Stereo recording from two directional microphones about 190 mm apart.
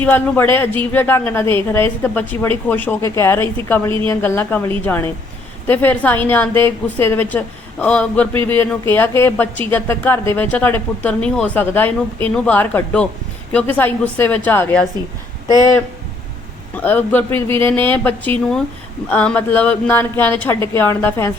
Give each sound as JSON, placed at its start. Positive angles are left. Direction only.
{"t": 0.0, "sound": "speech", "side_deg": 10}
{"t": 15.4, "sound": "speech", "side_deg": -20}
{"t": 16.8, "sound": "speech", "side_deg": 10}